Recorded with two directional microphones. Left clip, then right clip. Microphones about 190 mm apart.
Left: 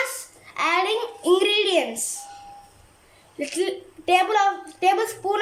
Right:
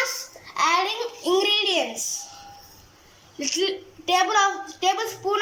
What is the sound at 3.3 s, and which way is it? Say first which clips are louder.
A child's voice: right 1 dB; 20° left (ahead or behind).